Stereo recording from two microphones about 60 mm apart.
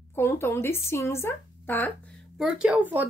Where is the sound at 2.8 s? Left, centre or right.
Right.